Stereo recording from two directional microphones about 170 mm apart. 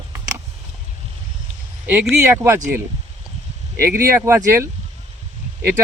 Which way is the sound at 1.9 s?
10° right (ahead or behind).